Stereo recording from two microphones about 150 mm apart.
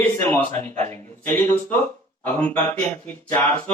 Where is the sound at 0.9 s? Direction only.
20° left (ahead or behind).